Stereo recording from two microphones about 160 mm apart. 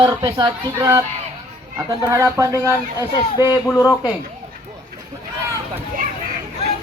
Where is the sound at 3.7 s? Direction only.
20° left (ahead or behind).